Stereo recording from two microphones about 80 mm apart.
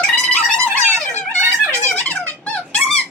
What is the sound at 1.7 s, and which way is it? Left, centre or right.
Music, centre.